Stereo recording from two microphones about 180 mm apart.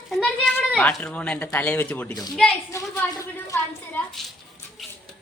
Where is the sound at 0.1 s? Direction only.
5° left (ahead or behind).